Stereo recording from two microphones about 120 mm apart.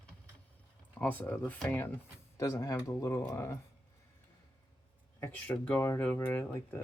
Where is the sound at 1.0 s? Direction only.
15° left (ahead or behind).